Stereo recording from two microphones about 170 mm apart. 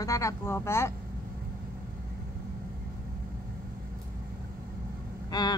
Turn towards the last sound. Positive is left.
turn(degrees=25)  # may be behind; listen again after turning